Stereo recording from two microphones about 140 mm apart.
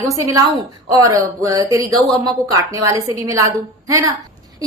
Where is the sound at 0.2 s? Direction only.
25° right (ahead or behind).